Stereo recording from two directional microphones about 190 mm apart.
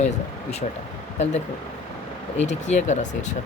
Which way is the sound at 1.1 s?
35° left (ahead or behind).